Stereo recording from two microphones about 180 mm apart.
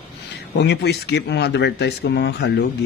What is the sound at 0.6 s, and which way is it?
Speech, 70° left (ahead or behind).